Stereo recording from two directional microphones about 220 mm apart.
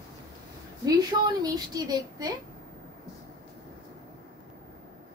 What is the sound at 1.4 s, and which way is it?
Speech, 20° right (ahead or behind).